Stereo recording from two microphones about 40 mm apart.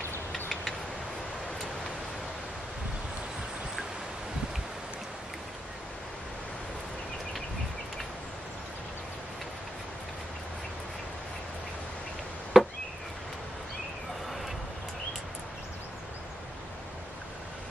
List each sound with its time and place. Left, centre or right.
12.6 s chop: centre